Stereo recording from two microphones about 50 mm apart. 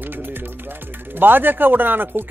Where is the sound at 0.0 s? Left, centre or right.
Right.